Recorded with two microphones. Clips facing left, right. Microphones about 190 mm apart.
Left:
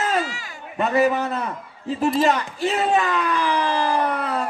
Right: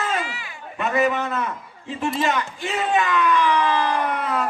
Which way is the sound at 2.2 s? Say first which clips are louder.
Left 4 dB; 35° left (ahead or behind).